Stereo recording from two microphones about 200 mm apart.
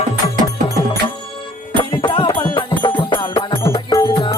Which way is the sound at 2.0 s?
25° left (ahead or behind).